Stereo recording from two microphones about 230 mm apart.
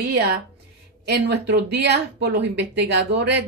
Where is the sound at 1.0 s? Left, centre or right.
Right.